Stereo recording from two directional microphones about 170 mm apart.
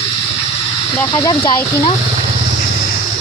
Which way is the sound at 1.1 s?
25° left (ahead or behind).